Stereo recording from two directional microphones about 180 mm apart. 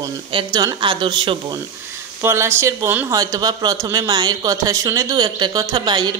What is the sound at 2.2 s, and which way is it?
Speech, 15° right (ahead or behind).